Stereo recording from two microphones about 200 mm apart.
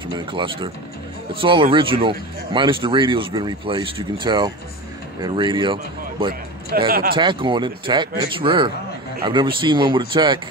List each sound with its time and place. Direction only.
0.3 s speech: 25° right (ahead or behind)
6.9 s speech: 45° right (ahead or behind)
7.2 s speech: 25° right (ahead or behind)